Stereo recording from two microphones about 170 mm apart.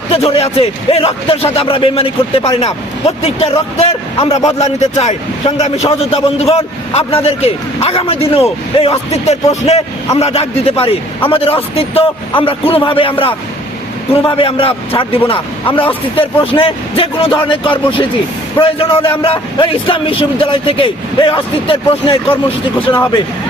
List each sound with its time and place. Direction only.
0.1 s a man's voice: 35° left (ahead or behind)